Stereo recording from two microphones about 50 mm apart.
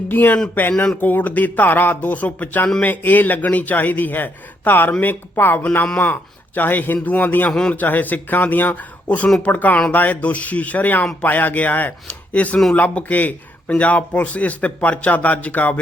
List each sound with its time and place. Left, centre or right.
0.1 s a man's voice: left